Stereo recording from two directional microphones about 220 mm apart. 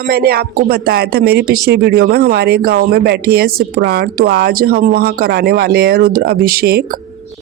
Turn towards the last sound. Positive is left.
turn(degrees=-40)  # may be behind; listen again after turning